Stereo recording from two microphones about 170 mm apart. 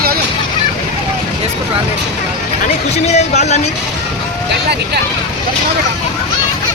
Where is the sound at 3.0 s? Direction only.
40° left (ahead or behind).